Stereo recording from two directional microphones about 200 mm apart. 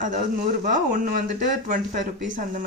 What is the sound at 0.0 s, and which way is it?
Speech, 40° right (ahead or behind).